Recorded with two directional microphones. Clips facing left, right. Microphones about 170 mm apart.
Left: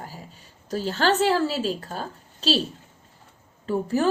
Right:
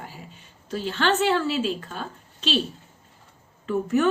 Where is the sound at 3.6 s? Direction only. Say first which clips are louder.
Right 1 dB; 35° left (ahead or behind).